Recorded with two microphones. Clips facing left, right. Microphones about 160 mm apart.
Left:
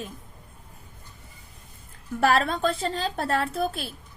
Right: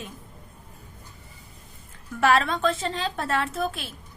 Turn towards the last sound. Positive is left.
turn(degrees=40)  # may be behind; listen again after turning